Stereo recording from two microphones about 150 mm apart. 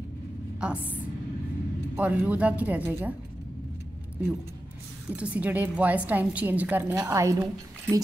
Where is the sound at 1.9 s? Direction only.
10° right (ahead or behind).